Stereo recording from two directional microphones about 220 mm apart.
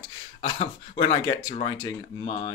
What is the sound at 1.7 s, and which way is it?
Speech, 15° left (ahead or behind).